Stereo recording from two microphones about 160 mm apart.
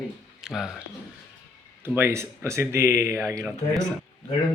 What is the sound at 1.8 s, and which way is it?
Speech, 15° right (ahead or behind).